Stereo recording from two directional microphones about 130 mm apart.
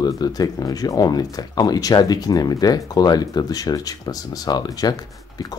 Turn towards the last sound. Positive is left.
turn(degrees=30)  # may be behind; listen again after turning